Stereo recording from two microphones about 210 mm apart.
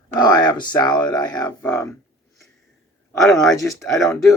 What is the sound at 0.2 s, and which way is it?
Speech, 20° left (ahead or behind).